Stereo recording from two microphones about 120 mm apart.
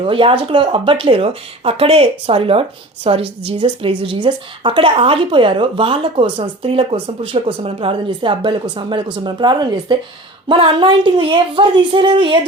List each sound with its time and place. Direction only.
0.0 s speech: 50° right (ahead or behind)